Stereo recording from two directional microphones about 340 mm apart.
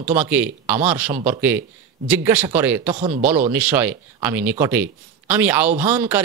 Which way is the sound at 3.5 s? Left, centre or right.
Centre.